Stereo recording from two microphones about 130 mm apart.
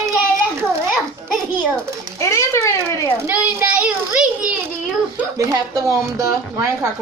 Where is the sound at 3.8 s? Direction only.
10° right (ahead or behind).